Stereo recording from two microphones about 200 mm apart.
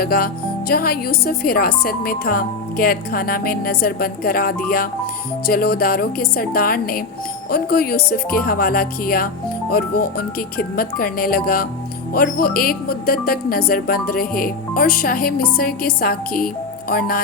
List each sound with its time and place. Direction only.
0.0 s speech: 50° left (ahead or behind)